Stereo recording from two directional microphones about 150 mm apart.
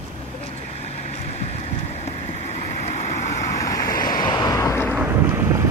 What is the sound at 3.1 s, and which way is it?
Waves, 20° left (ahead or behind).